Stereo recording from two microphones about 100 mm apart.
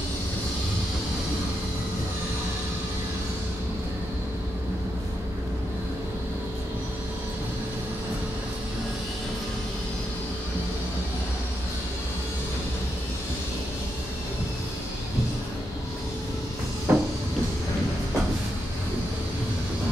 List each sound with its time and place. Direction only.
16.9 s cupboard open or close: 25° right (ahead or behind)